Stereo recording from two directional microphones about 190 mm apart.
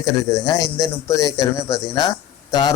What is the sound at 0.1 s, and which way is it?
Speech, 20° left (ahead or behind).